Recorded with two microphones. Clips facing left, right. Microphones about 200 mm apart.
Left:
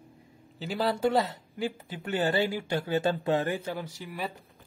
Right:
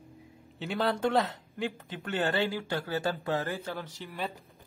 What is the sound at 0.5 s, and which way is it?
Speech, centre (ahead or behind).